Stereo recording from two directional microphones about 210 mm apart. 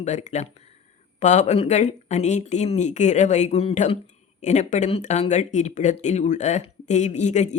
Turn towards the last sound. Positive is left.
turn(degrees=35)  # may be behind; listen again after turning